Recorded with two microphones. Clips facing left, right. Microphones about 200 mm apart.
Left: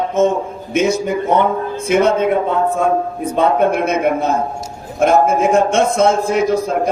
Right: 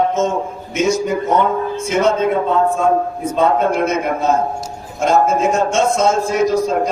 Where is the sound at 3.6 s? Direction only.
60° left (ahead or behind).